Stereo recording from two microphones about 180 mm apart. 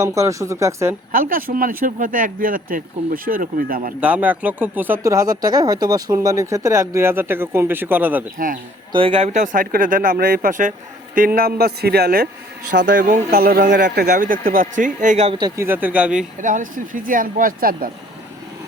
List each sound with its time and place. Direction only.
0.0 s speech: 15° right (ahead or behind)
1.1 s speech: 50° right (ahead or behind)
4.0 s speech: 10° right (ahead or behind)
8.9 s speech: 30° right (ahead or behind); by 13.8 s 50° right (ahead or behind)
13.8 s speech: 65° right (ahead or behind); by 15.4 s 40° right (ahead or behind)
15.4 s speech: 20° right (ahead or behind)
16.4 s speech: 45° right (ahead or behind)